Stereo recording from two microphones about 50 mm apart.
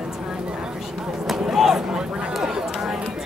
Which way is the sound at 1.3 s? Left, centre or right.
Centre.